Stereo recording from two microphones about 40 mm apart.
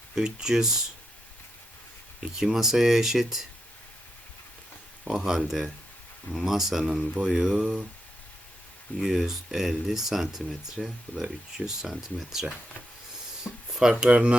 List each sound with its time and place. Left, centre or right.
0.2 s speech: centre
2.2 s speech: centre
5.0 s speech: centre
9.0 s speech: centre
13.4 s a sound: centre
14.1 s speech: right